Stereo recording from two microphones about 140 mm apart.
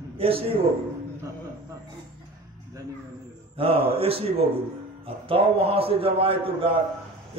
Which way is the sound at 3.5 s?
40° right (ahead or behind).